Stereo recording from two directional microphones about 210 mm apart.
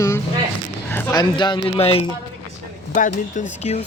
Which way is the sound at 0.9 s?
15° left (ahead or behind).